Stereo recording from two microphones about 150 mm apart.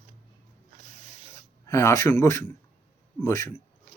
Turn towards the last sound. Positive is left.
turn(degrees=15)  # may be behind; listen again after turning